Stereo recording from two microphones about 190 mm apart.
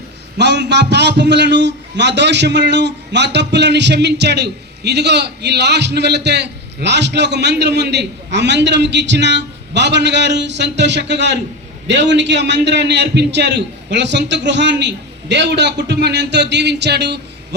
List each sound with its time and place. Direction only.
0.3 s a man's voice: 65° right (ahead or behind)